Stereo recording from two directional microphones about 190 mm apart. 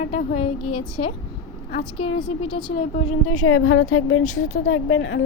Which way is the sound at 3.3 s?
90° left.